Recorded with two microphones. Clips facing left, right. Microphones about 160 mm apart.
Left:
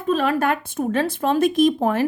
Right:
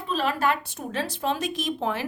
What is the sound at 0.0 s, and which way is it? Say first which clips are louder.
Speech: left 5 dB; 50° left (ahead or behind).